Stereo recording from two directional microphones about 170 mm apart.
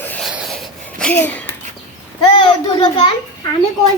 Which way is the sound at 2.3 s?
30° left (ahead or behind).